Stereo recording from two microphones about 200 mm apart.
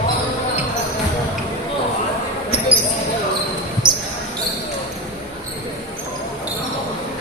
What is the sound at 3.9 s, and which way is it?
Basketball bounce, 25° right (ahead or behind).